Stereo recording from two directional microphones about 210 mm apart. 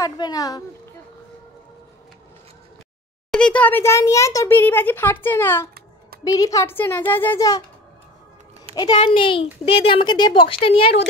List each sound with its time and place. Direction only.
0.0 s a child's voice: 15° left (ahead or behind)
3.3 s a child's voice: 5° left (ahead or behind)
8.7 s a woman's voice: 20° left (ahead or behind)